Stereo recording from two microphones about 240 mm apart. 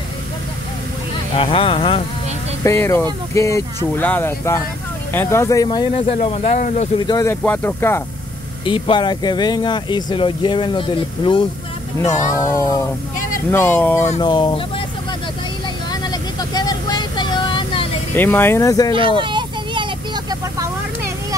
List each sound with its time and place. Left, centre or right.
1.3 s speech: left
2.6 s speech: centre; by 7.2 s left
7.2 s speech: centre
8.6 s speech: left
15.9 s a sound: centre
18.1 s speech: centre
18.9 s vehicle: right